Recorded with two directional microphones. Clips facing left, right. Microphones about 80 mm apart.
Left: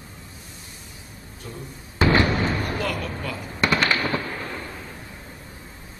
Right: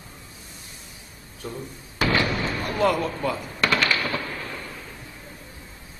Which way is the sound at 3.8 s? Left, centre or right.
Left.